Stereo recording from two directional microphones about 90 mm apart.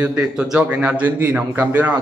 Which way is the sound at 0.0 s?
15° right (ahead or behind).